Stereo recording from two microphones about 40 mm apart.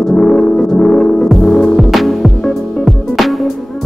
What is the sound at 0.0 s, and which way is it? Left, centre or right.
Music, centre.